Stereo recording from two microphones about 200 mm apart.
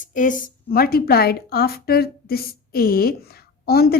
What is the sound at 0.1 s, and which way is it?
Speech, 40° left (ahead or behind).